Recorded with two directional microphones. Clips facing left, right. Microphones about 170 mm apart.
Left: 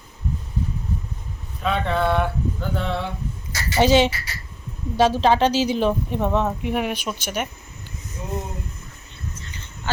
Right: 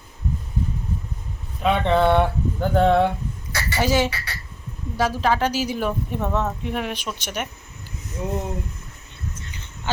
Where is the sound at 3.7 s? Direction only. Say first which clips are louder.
Left 5 dB; 20° left (ahead or behind); by 7.5 s 5° left (ahead or behind).